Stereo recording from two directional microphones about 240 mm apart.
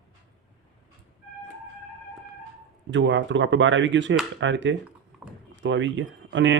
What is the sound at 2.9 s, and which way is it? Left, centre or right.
Speech, right.